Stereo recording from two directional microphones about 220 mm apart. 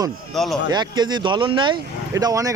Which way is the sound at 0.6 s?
20° right (ahead or behind).